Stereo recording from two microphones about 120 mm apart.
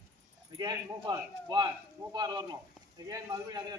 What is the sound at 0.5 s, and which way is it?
A man's voice, 40° right (ahead or behind).